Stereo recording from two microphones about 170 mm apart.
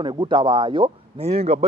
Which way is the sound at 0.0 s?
25° right (ahead or behind).